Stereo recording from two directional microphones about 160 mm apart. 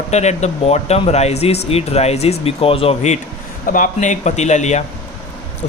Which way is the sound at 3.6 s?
55° left (ahead or behind).